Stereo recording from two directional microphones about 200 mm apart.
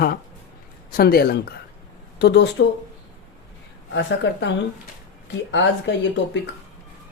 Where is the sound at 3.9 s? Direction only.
65° left (ahead or behind).